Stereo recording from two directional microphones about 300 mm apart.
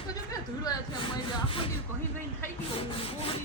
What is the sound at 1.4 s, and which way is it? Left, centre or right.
Rub, centre.